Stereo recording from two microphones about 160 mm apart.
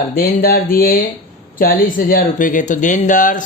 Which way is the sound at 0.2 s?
65° left (ahead or behind).